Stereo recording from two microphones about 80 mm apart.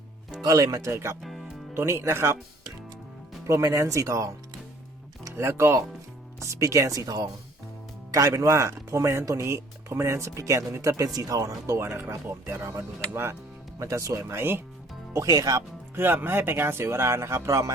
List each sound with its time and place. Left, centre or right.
0.4 s speech: right
0.9 s speech: right
3.4 s speech: right
5.3 s speech: right
8.3 s speech: right
15.1 s speech: right
16.0 s speech: right